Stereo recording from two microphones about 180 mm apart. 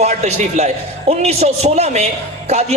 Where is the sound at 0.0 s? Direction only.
40° right (ahead or behind).